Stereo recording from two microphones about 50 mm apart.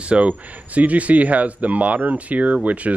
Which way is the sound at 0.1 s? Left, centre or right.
Right.